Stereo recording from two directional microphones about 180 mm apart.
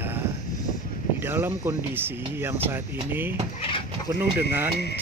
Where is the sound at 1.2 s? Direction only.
10° right (ahead or behind).